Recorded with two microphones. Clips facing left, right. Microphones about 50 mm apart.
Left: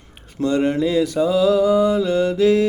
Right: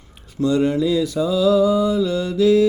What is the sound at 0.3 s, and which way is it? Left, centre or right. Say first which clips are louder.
Mantra: right 1 dB; left.